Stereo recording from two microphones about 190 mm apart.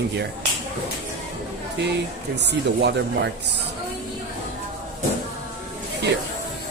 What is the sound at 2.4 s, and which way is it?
Speech, 65° right (ahead or behind).